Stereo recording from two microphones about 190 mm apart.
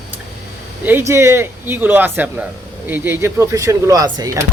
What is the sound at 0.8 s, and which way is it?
Speech, 10° right (ahead or behind).